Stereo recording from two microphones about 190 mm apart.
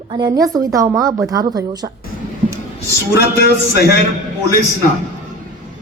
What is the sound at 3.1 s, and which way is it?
Speech, 55° left (ahead or behind).